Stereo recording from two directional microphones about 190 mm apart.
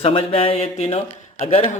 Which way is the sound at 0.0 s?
30° left (ahead or behind).